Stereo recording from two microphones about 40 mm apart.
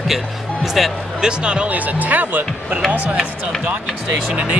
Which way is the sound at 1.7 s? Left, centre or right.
Right.